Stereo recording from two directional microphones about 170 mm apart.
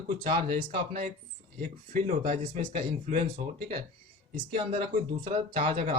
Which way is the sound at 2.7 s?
35° right (ahead or behind).